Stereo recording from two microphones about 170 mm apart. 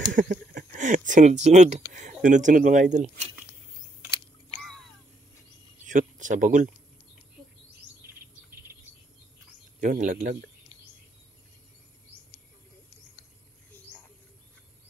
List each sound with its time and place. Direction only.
0.1 s a sound: 55° right (ahead or behind)
2.2 s speech: 50° right (ahead or behind)
5.9 s speech: 50° right (ahead or behind)
9.8 s speech: 50° right (ahead or behind)